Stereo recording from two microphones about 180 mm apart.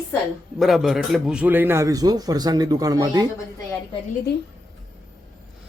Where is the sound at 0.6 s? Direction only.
Centre (ahead or behind); by 3.2 s 20° right (ahead or behind).